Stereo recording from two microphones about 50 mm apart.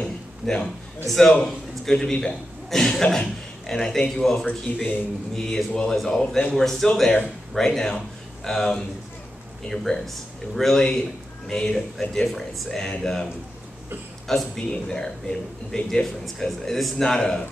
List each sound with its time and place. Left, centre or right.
0.0 s a sound: centre
1.0 s a man's voice: centre
4.7 s a man's voice: left
5.3 s speech: centre
12.3 s speech: centre